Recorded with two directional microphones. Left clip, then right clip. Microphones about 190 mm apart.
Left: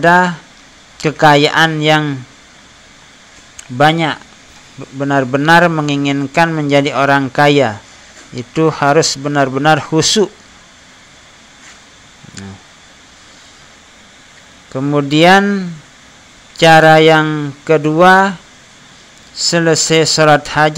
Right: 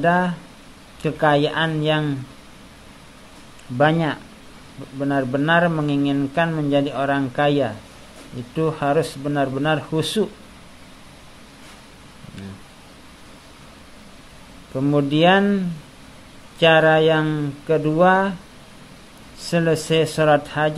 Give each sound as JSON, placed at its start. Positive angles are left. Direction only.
{"t": 0.0, "sound": "speech", "side_deg": 15}
{"t": 3.7, "sound": "speech", "side_deg": 15}
{"t": 14.7, "sound": "speech", "side_deg": 10}
{"t": 19.3, "sound": "speech", "side_deg": 10}